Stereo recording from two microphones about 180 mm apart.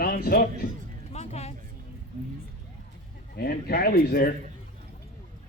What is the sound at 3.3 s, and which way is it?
Speech, 60° left (ahead or behind).